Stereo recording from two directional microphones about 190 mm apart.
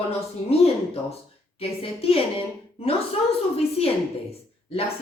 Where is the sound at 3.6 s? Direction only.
30° left (ahead or behind).